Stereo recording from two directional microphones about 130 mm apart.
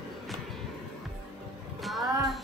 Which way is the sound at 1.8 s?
Centre (ahead or behind).